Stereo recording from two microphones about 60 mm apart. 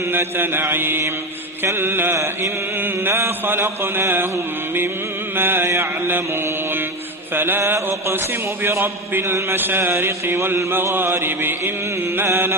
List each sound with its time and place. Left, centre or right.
0.0 s chant: right
5.4 s chant: right